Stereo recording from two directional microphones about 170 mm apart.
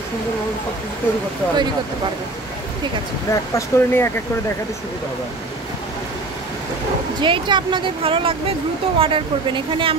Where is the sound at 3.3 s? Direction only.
15° left (ahead or behind).